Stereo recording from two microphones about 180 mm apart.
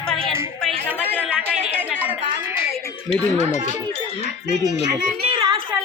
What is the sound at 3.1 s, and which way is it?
Speech, 40° left (ahead or behind).